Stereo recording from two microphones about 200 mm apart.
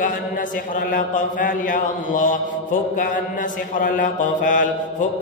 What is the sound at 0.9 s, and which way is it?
A man's voice, 45° left (ahead or behind).